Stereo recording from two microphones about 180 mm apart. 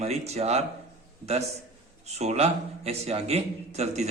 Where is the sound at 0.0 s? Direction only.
35° right (ahead or behind).